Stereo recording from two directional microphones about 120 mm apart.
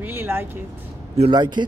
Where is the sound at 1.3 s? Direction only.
40° right (ahead or behind).